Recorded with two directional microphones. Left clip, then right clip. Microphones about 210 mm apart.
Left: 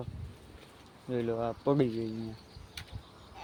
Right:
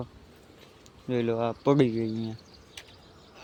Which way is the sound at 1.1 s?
40° right (ahead or behind).